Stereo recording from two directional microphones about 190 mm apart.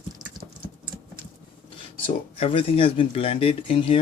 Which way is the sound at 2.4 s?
30° left (ahead or behind).